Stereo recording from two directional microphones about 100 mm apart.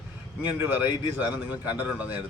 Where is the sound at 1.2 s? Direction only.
15° right (ahead or behind).